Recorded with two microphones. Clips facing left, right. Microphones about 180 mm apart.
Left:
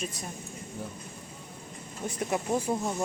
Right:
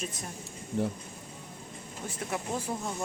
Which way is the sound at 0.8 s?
80° right.